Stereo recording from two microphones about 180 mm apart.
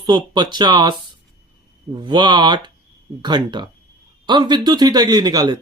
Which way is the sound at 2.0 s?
25° right (ahead or behind).